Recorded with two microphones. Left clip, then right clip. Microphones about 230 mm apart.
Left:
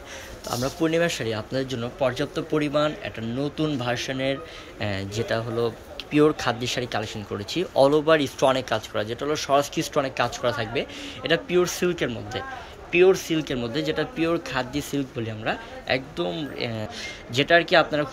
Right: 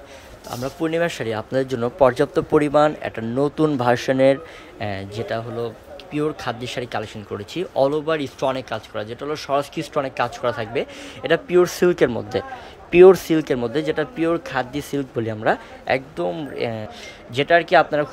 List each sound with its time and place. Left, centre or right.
0.5 s speech: centre; by 4.4 s right
4.7 s speech: centre